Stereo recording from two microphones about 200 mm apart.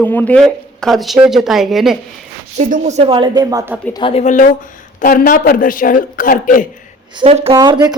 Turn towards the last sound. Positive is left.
turn(degrees=-20)  # may be behind; listen again after turning